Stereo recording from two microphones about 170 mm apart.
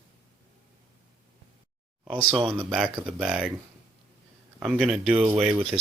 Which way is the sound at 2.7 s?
Centre (ahead or behind).